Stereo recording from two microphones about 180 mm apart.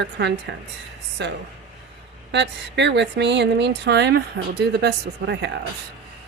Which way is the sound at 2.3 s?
75° right (ahead or behind).